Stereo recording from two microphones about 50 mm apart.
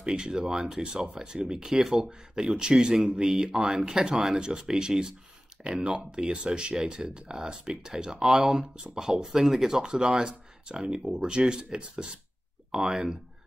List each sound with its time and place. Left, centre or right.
0.0 s speech: centre
10.8 s speech: centre